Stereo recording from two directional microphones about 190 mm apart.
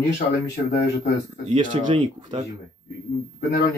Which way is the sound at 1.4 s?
35° right (ahead or behind).